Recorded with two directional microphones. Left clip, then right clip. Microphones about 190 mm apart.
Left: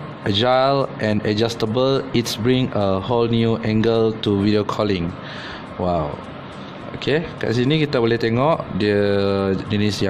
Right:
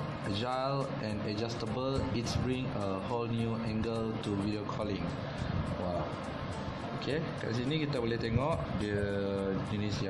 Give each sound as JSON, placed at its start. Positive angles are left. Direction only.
{"t": 0.3, "sound": "speech", "side_deg": 60}
{"t": 7.1, "sound": "speech", "side_deg": 65}